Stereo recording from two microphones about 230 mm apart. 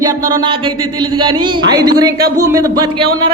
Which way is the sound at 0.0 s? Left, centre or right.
Centre.